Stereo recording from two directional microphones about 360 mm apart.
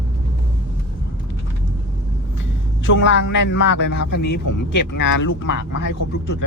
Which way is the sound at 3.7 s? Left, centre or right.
Left.